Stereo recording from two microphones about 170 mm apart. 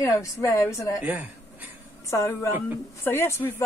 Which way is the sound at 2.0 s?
15° left (ahead or behind).